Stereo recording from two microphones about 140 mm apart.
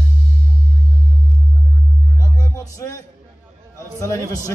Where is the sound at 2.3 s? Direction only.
25° left (ahead or behind).